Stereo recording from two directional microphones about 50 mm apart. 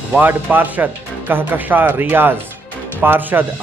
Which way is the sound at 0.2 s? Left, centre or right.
Right.